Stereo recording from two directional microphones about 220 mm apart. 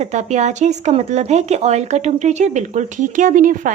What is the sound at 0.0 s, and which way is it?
Speech, 30° right (ahead or behind).